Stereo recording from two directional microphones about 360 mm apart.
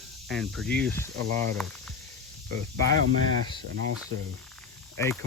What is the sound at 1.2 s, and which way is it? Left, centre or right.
Speech, right.